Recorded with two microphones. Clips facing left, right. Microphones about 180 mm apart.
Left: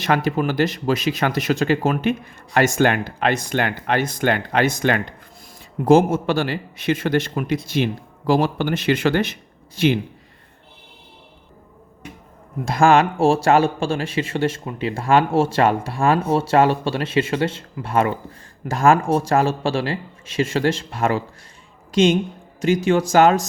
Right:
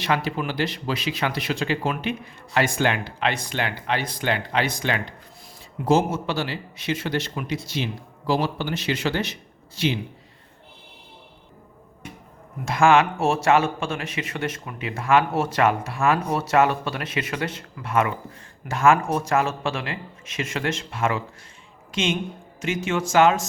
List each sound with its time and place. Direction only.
0.0 s speech: 45° left (ahead or behind)
12.6 s speech: 35° left (ahead or behind)